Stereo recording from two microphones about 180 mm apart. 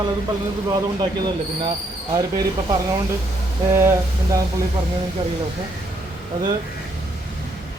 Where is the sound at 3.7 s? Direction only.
15° right (ahead or behind).